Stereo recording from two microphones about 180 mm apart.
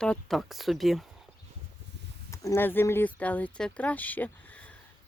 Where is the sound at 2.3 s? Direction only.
15° left (ahead or behind).